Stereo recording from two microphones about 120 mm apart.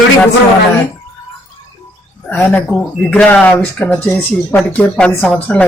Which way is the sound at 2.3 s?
15° left (ahead or behind).